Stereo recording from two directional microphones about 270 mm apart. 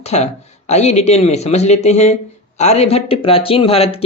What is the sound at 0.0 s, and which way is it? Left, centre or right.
Speech, left.